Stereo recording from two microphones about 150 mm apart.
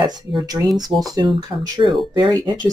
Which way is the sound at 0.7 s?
Centre (ahead or behind).